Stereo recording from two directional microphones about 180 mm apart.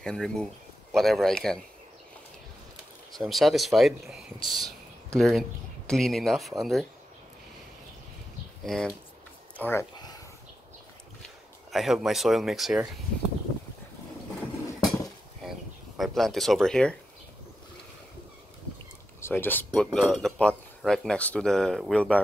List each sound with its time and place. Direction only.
0.0 s speech: 5° left (ahead or behind)
3.2 s speech: centre (ahead or behind)
8.6 s speech: 5° left (ahead or behind)
9.6 s a sound: 15° left (ahead or behind)
11.2 s speech: centre (ahead or behind)
16.0 s speech: centre (ahead or behind)
19.1 s speech: 10° left (ahead or behind)